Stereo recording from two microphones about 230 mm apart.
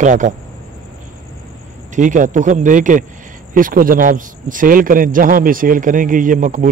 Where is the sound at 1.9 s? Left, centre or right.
Right.